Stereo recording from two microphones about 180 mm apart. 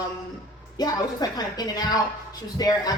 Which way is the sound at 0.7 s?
20° left (ahead or behind).